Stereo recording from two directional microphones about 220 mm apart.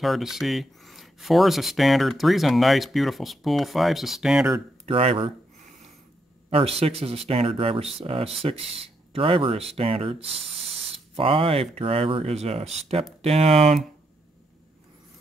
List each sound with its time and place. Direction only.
0.0 s speech: centre (ahead or behind)
4.8 s speech: 25° right (ahead or behind)
6.5 s speech: 25° right (ahead or behind)